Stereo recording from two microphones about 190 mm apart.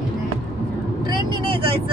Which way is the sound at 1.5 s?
25° right (ahead or behind).